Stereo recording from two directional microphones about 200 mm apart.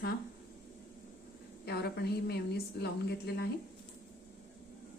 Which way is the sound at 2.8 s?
55° left (ahead or behind).